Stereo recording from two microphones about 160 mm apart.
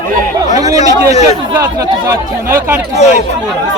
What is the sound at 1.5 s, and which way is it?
Speech, 15° right (ahead or behind).